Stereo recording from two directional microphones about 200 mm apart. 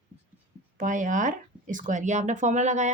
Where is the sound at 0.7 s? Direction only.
40° right (ahead or behind).